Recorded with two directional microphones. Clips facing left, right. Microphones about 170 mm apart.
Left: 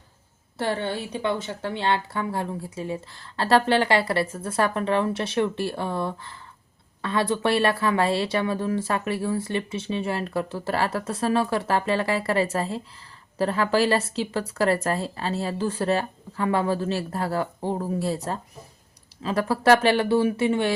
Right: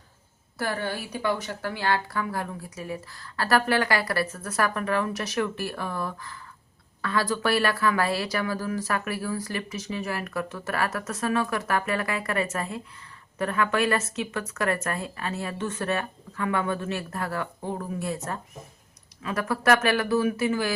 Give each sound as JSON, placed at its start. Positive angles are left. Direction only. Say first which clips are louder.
{"t": 0.6, "sound": "a woman's voice", "louder": "left 3 dB", "side_deg": 25}